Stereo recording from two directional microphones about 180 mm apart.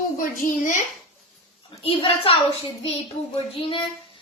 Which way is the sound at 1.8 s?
30° left (ahead or behind).